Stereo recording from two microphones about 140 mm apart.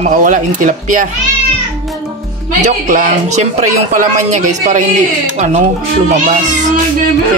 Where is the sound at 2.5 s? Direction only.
60° right (ahead or behind).